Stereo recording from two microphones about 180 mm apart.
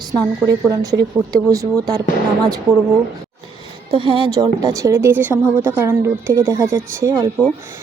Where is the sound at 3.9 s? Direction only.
30° right (ahead or behind).